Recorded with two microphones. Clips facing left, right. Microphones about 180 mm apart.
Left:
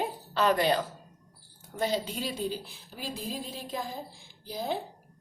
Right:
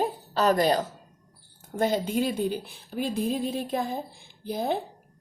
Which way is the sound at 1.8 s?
50° right (ahead or behind).